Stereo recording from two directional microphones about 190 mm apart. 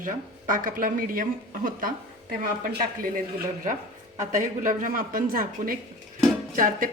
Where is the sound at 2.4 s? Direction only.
50° right (ahead or behind).